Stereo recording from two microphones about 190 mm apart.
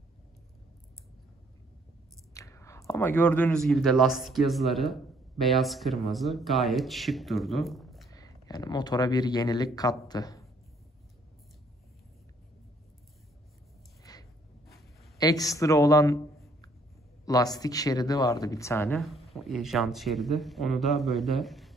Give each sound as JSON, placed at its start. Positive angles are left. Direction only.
{"t": 2.3, "sound": "whispering", "side_deg": 15}
{"t": 2.9, "sound": "speech", "side_deg": 10}
{"t": 8.1, "sound": "speech", "side_deg": 20}
{"t": 14.1, "sound": "a sound", "side_deg": 20}
{"t": 15.1, "sound": "speech", "side_deg": 20}
{"t": 17.2, "sound": "speech", "side_deg": 20}
{"t": 18.9, "sound": "speech", "side_deg": 0}